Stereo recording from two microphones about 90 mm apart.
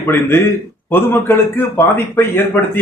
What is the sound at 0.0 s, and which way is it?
Speech, 30° left (ahead or behind).